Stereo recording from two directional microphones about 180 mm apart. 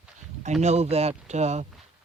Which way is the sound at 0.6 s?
35° right (ahead or behind).